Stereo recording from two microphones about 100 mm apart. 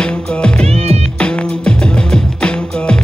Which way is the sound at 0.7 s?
90° right.